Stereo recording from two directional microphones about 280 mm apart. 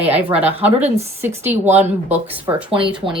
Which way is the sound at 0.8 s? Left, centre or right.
Right.